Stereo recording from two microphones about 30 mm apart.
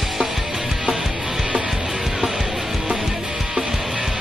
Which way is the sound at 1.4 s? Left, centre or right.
Right.